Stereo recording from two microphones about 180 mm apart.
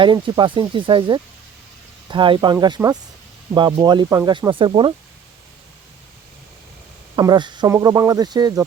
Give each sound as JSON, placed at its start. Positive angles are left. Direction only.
{"t": 0.0, "sound": "speech", "side_deg": -25}
{"t": 7.2, "sound": "speech", "side_deg": -25}